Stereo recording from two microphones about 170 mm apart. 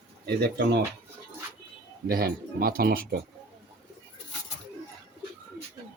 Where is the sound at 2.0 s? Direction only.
60° right (ahead or behind).